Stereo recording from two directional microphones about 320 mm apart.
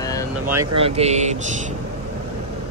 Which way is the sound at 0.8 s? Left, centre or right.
Centre.